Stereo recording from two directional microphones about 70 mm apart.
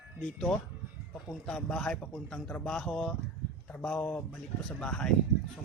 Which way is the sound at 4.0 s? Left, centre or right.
Left.